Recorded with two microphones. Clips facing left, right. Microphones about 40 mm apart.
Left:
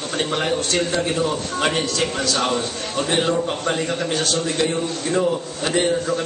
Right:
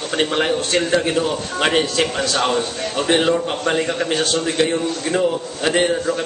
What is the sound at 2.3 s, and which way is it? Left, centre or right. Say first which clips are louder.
Speech: right 4 dB; centre.